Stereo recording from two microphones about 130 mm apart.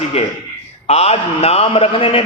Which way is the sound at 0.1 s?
50° left (ahead or behind).